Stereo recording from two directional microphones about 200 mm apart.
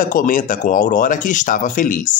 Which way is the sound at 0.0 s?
40° left (ahead or behind).